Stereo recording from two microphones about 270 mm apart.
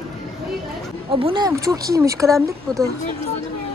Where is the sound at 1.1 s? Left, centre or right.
Centre.